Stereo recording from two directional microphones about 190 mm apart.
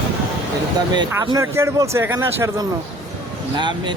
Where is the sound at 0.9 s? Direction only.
20° right (ahead or behind).